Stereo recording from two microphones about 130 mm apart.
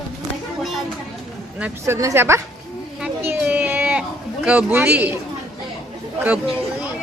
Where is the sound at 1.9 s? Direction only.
20° right (ahead or behind).